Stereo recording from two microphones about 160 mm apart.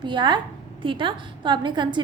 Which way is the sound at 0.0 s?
30° right (ahead or behind).